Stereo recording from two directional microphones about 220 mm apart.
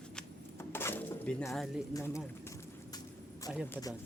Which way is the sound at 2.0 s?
15° left (ahead or behind).